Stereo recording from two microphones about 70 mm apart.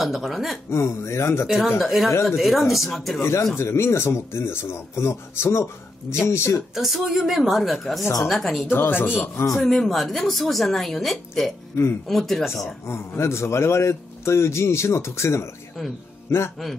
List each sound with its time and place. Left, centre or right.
0.0 s speech: centre
0.7 s a man's voice: left
1.8 s speech: centre
3.2 s a man's voice: left
6.7 s speech: centre
8.7 s a man's voice: left
9.6 s speech: centre
11.7 s a man's voice: left
12.1 s speech: centre
12.5 s a man's voice: left